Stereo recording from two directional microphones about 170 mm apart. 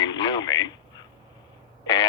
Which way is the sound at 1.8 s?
25° left (ahead or behind).